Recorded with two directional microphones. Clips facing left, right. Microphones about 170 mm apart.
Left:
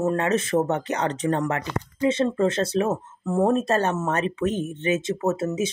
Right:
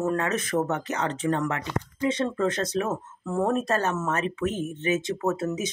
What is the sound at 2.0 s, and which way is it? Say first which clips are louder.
Speech: left 4 dB; 25° left (ahead or behind).